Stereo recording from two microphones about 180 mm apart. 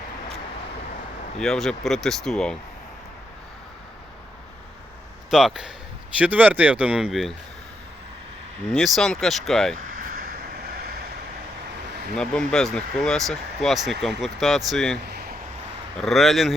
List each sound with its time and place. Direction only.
1.4 s speech: centre (ahead or behind)
5.3 s speech: 5° right (ahead or behind)
8.6 s speech: 5° left (ahead or behind)
9.7 s vehicle: 50° right (ahead or behind)
12.1 s speech: 5° left (ahead or behind)
15.0 s a sound: 60° right (ahead or behind)
16.0 s speech: centre (ahead or behind)